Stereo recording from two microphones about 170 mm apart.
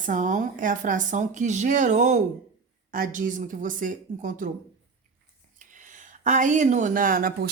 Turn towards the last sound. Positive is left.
turn(degrees=-60)  # may be behind; listen again after turning